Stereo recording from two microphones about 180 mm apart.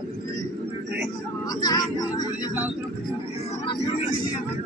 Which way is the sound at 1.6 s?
20° left (ahead or behind).